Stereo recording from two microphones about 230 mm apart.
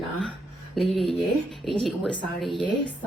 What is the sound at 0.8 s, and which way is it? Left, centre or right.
Speech, centre.